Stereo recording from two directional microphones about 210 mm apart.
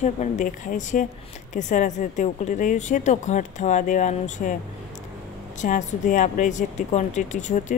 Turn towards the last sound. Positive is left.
turn(degrees=35)  # may be behind; listen again after turning